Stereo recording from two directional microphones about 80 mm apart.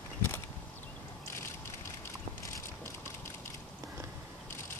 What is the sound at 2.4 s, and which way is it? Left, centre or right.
Mechanisms, left.